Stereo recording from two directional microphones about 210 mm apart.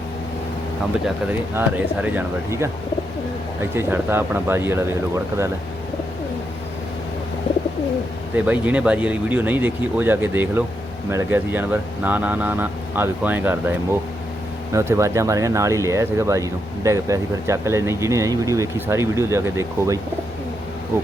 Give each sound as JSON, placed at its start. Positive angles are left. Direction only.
{"t": 1.0, "sound": "speech", "side_deg": -10}
{"t": 8.4, "sound": "speech", "side_deg": -5}